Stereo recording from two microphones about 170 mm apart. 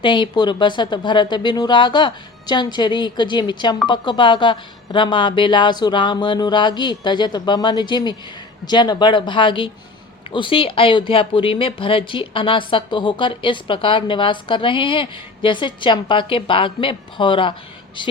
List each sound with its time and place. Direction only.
0.0 s speech: 30° left (ahead or behind)